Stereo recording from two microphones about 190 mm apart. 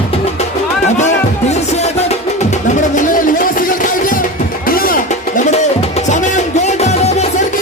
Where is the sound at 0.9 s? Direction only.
35° left (ahead or behind).